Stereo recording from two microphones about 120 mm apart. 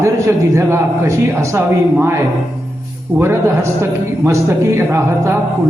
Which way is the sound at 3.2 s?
20° right (ahead or behind).